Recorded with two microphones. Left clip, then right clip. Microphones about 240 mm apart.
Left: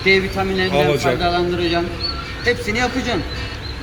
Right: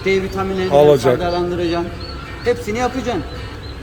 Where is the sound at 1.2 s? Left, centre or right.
Centre.